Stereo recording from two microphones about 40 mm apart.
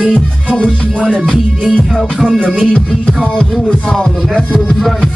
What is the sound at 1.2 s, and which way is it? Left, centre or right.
Music, centre.